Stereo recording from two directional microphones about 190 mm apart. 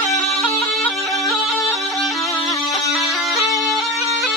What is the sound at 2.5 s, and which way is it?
Bagpipes, centre (ahead or behind).